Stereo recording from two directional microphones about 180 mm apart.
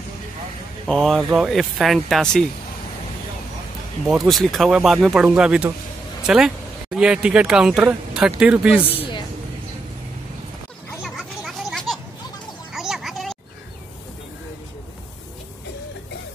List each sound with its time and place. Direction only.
0.8 s speech: centre (ahead or behind)
4.1 s speech: centre (ahead or behind)
11.0 s children playing: centre (ahead or behind)
12.7 s a sound: centre (ahead or behind)